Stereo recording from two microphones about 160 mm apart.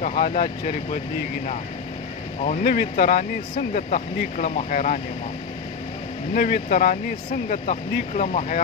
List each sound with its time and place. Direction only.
0.2 s speech: 60° left (ahead or behind)
2.6 s speech: 75° left (ahead or behind)
3.2 s speech: 50° left (ahead or behind)
6.3 s speech: 65° left (ahead or behind)
8.1 s speech: 45° left (ahead or behind)